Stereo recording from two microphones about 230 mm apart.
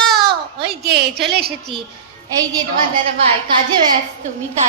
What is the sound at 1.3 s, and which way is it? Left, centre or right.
Speech, right.